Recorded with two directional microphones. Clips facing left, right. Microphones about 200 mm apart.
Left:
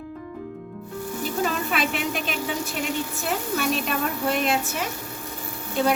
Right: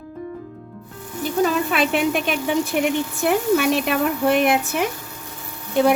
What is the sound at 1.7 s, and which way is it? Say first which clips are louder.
Speech: right 6 dB; 55° right (ahead or behind).